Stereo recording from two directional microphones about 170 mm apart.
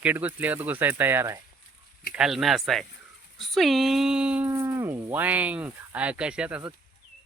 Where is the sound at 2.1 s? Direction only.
Centre (ahead or behind).